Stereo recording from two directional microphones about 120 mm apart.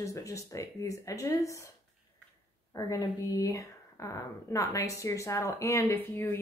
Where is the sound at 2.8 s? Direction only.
30° left (ahead or behind).